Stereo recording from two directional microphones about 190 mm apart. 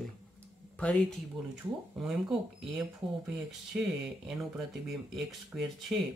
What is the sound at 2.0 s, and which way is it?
Speech, centre (ahead or behind).